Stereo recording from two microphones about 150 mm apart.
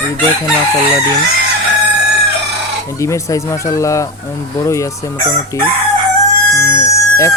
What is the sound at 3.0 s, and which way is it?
Speech, 20° left (ahead or behind).